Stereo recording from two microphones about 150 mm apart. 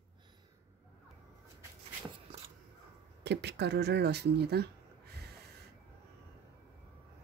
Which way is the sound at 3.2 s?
90° right.